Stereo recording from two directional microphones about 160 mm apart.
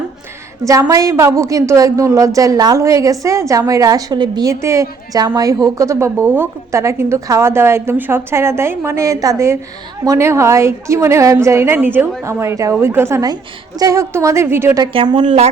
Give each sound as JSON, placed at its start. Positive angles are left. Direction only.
{"t": 0.6, "sound": "a woman's voice", "side_deg": -20}
{"t": 14.9, "sound": "a woman's voice", "side_deg": -30}